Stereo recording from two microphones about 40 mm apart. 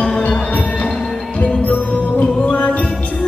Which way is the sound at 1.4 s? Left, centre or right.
Left.